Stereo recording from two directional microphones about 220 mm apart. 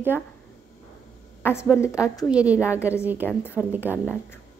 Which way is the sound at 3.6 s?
10° right (ahead or behind).